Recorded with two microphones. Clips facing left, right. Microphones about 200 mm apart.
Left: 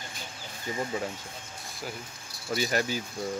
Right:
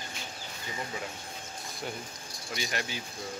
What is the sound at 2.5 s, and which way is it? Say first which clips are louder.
Speech: left 8 dB; 40° left (ahead or behind).